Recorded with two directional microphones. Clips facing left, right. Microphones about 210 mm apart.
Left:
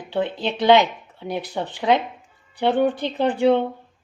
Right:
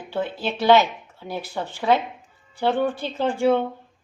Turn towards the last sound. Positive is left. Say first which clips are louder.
# left 2 dB
turn(degrees=15)  # may be behind; listen again after turning